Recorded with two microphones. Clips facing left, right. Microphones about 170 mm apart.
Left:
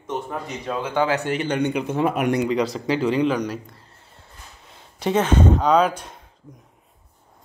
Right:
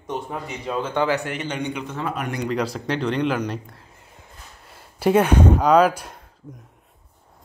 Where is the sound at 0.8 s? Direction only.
10° left (ahead or behind).